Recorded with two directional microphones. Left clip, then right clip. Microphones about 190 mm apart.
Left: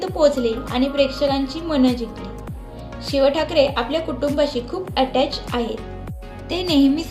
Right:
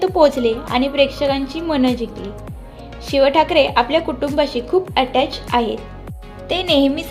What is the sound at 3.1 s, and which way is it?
A woman's voice, 35° right (ahead or behind).